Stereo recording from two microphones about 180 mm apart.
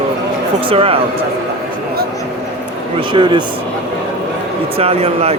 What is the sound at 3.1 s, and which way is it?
Speech, 25° right (ahead or behind).